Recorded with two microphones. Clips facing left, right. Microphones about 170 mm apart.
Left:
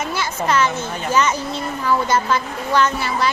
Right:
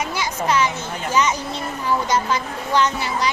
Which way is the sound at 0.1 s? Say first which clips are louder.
Left 1 dB; 15° right (ahead or behind).